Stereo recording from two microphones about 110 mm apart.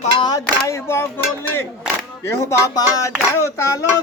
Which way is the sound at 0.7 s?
20° left (ahead or behind).